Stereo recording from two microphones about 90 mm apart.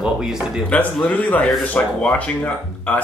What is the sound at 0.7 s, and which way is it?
Speech, 15° left (ahead or behind).